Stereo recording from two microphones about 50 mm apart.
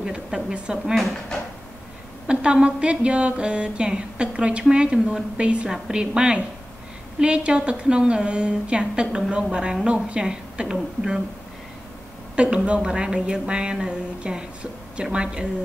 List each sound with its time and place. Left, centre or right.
0.0 s a woman's voice: centre
2.2 s a woman's voice: right
12.4 s a woman's voice: right